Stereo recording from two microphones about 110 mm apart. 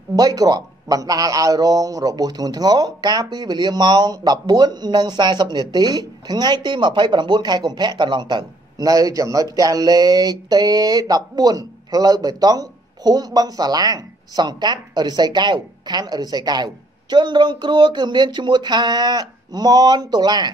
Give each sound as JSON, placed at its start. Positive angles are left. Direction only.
{"t": 0.1, "sound": "a man's voice", "side_deg": -35}